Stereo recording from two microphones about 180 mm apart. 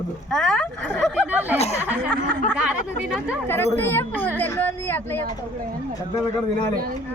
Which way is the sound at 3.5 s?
15° left (ahead or behind).